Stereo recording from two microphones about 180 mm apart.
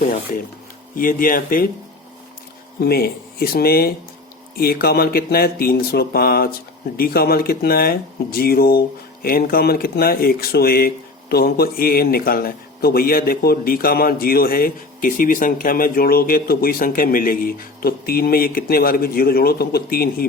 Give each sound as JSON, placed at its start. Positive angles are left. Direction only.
{"t": 0.9, "sound": "speech", "side_deg": 50}
{"t": 2.8, "sound": "speech", "side_deg": 60}